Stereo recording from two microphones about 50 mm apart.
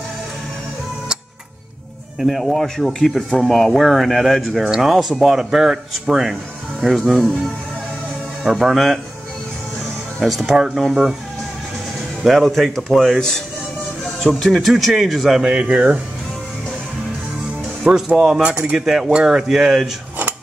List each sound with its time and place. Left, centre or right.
2.1 s speech: centre
8.5 s speech: centre
10.2 s speech: centre
12.2 s speech: centre
14.5 s speech: centre
15.4 s speech: centre
17.8 s speech: centre
18.4 s speech: right
18.8 s speech: centre